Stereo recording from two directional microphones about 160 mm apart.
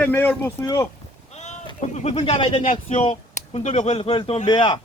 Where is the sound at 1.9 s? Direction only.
45° left (ahead or behind).